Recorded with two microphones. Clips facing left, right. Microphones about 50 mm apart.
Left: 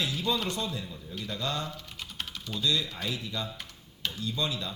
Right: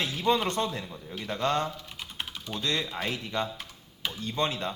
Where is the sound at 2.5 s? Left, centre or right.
Right.